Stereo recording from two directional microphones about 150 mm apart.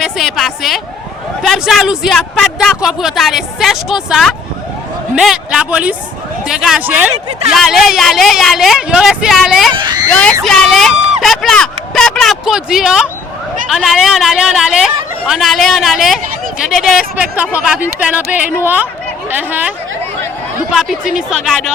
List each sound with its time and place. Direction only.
0.0 s speech: centre (ahead or behind)
9.7 s a child's voice: 30° right (ahead or behind)
10.4 s speech: 5° left (ahead or behind); by 19.7 s 10° right (ahead or behind)
20.7 s speech: 5° right (ahead or behind)